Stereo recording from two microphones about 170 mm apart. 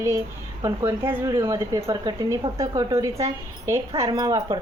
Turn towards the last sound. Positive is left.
turn(degrees=-20)  # may be behind; listen again after turning